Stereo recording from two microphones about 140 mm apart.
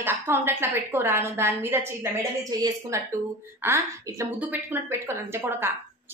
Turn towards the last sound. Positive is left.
turn(degrees=-15)  # may be behind; listen again after turning